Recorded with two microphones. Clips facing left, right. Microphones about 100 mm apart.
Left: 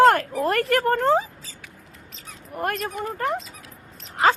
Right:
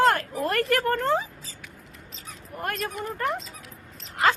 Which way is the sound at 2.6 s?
45° left (ahead or behind).